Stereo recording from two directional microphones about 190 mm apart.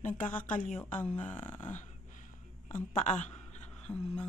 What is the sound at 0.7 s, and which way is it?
A woman's voice, 10° left (ahead or behind).